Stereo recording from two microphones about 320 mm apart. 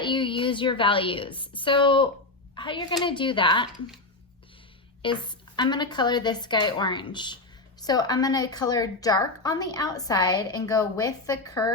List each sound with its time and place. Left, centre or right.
0.0 s a woman's voice: centre
5.0 s a woman's voice: centre